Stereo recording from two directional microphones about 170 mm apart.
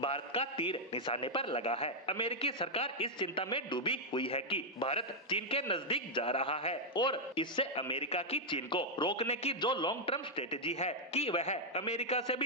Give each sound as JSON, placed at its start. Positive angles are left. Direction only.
{"t": 0.0, "sound": "a man's voice", "side_deg": 35}